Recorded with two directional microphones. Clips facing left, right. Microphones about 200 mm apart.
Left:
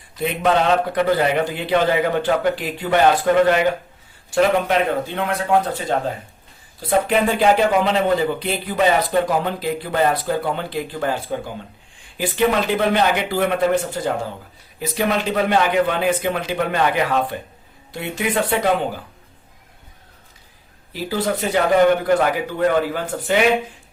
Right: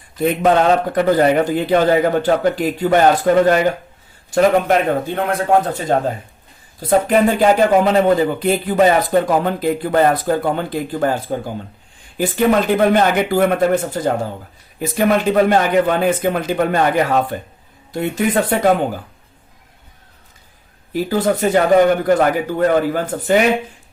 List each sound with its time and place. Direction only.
0.2 s a man's voice: 45° right (ahead or behind)
20.9 s a man's voice: 50° right (ahead or behind)